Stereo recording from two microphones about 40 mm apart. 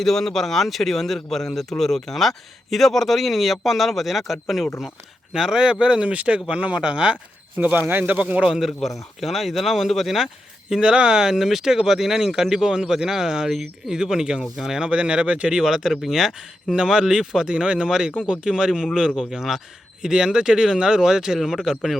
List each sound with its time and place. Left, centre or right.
0.0 s speech: centre
5.3 s speech: centre
5.8 s speech: right
7.8 s speech: right
8.5 s speech: centre
10.7 s speech: right
14.8 s speech: right
15.6 s speech: centre
19.3 s speech: centre
21.3 s speech: centre